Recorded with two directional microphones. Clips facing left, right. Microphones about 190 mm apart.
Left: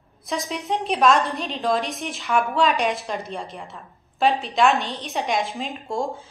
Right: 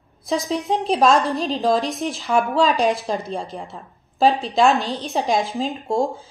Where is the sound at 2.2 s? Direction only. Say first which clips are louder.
Right 2 dB; 35° right (ahead or behind).